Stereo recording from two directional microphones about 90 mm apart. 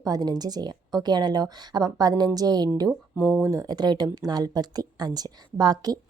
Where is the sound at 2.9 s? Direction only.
20° right (ahead or behind).